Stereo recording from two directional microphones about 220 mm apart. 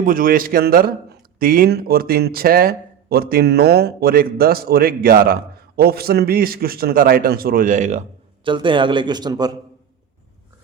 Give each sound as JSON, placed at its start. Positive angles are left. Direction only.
{"t": 0.0, "sound": "a man's voice", "side_deg": -40}
{"t": 8.4, "sound": "a man's voice", "side_deg": -20}